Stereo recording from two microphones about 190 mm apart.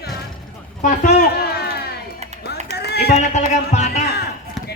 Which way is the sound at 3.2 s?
35° left (ahead or behind).